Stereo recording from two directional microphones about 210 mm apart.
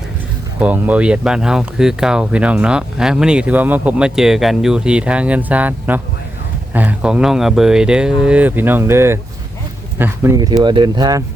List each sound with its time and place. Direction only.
0.6 s speech: 5° right (ahead or behind)